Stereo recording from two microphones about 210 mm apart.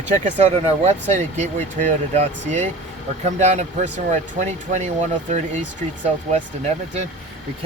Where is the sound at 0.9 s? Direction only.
30° right (ahead or behind).